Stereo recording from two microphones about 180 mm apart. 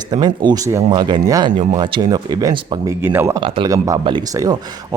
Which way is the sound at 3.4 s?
30° right (ahead or behind).